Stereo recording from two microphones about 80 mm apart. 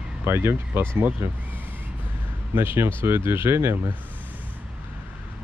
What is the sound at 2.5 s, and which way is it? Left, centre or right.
Speech, right.